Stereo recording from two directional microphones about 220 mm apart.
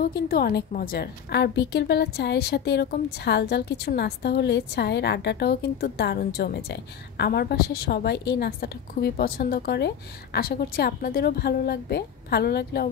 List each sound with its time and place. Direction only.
0.0 s a woman's voice: 45° left (ahead or behind)